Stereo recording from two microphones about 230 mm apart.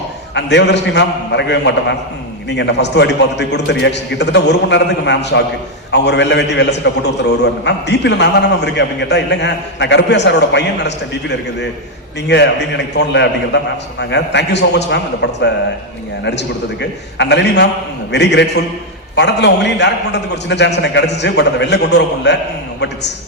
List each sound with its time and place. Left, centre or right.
0.3 s a man's voice: left